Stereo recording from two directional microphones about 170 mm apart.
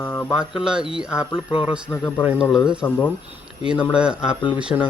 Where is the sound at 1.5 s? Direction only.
35° left (ahead or behind).